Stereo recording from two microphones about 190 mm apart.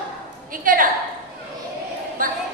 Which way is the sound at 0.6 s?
45° right (ahead or behind).